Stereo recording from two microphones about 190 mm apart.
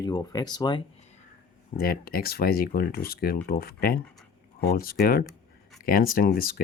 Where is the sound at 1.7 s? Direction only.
50° left (ahead or behind).